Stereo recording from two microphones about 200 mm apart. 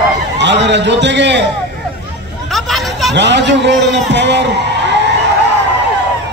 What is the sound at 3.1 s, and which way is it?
A man's voice, 60° right (ahead or behind).